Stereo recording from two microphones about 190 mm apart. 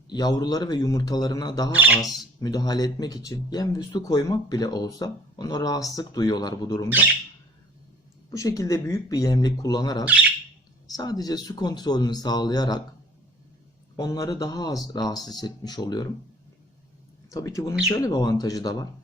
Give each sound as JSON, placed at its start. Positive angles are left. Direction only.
{"t": 0.1, "sound": "speech", "side_deg": 20}
{"t": 1.7, "sound": "speech", "side_deg": -10}
{"t": 2.4, "sound": "speech", "side_deg": 20}
{"t": 8.3, "sound": "speech", "side_deg": 15}
{"t": 10.1, "sound": "bird", "side_deg": -10}
{"t": 10.9, "sound": "speech", "side_deg": 20}
{"t": 13.9, "sound": "speech", "side_deg": 20}
{"t": 17.3, "sound": "speech", "side_deg": 15}